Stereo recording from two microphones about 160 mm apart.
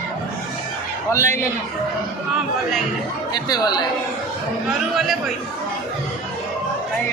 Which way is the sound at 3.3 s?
25° left (ahead or behind).